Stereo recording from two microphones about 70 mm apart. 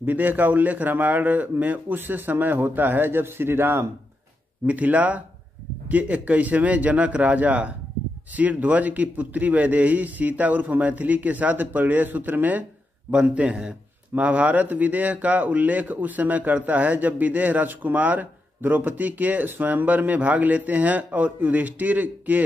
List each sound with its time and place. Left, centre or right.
0.0 s speech: right
4.6 s speech: right